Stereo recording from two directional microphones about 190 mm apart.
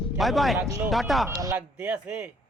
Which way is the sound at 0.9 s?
Centre (ahead or behind).